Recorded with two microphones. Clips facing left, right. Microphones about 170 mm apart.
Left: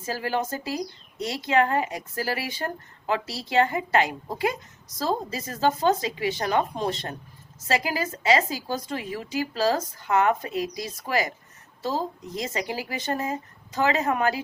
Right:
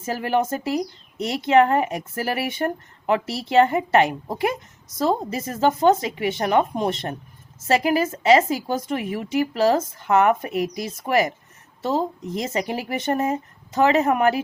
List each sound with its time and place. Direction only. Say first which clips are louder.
0.0 s a woman's voice: right 5 dB; 25° right (ahead or behind)